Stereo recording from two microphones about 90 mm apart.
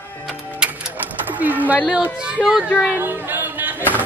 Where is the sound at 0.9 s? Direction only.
20° right (ahead or behind).